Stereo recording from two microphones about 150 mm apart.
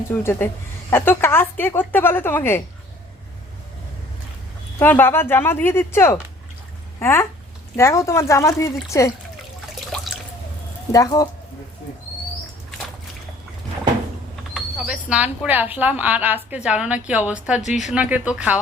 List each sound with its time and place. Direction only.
0.1 s a woman's voice: 15° left (ahead or behind)
4.8 s a woman's voice: 10° left (ahead or behind)
9.9 s drip: 5° left (ahead or behind)
10.9 s speech: 25° left (ahead or behind)
14.5 s a woman's voice: 5° right (ahead or behind)
17.6 s a woman's voice: 50° left (ahead or behind)
17.9 s a woman's voice: 10° right (ahead or behind)